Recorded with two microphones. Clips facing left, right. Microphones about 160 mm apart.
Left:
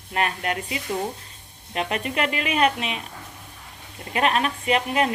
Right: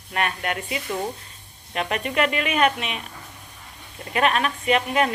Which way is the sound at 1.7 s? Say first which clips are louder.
Even; 35° left (ahead or behind).